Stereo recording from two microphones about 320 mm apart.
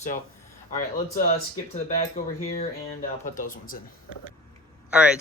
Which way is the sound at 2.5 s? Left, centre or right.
Left.